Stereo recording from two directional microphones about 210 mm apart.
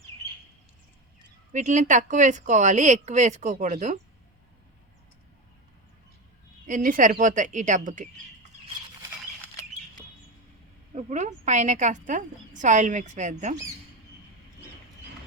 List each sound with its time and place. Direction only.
1.5 s a woman's voice: 35° right (ahead or behind)
6.7 s a woman's voice: 40° right (ahead or behind)
10.9 s a woman's voice: 35° right (ahead or behind)